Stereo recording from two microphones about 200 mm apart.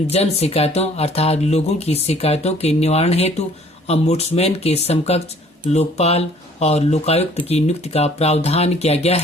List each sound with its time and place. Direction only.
0.1 s speech: 30° left (ahead or behind)